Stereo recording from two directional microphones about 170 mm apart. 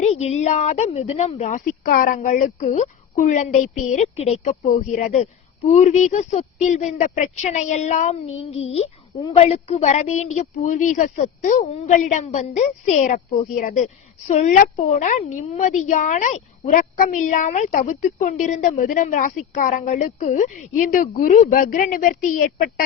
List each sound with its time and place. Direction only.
0.0 s a woman's voice: 40° left (ahead or behind)